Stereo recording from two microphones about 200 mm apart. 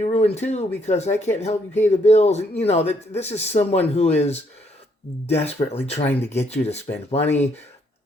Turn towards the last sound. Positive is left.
turn(degrees=35)  # may be behind; listen again after turning